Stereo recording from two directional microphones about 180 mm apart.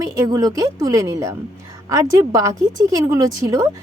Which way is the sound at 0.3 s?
20° right (ahead or behind).